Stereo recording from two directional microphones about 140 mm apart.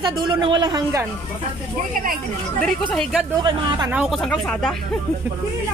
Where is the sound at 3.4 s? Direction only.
35° right (ahead or behind).